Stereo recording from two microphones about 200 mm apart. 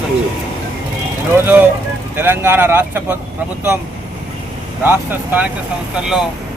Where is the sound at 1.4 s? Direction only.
10° right (ahead or behind).